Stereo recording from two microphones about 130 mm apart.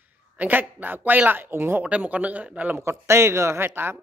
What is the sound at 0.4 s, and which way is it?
Speech, 15° right (ahead or behind).